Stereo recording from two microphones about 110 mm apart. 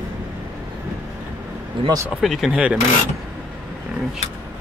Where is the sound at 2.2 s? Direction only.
Centre (ahead or behind).